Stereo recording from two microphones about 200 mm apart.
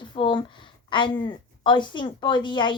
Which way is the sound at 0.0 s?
25° left (ahead or behind).